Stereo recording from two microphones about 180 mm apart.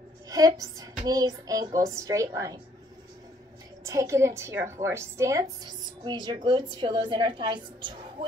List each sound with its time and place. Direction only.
0.3 s speech: 20° right (ahead or behind)
3.8 s a woman's voice: 15° right (ahead or behind)